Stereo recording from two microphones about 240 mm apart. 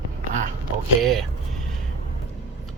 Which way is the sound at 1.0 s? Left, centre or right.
Centre.